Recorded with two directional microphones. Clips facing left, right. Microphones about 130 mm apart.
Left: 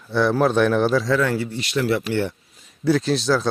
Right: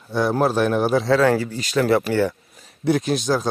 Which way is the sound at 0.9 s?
55° right (ahead or behind).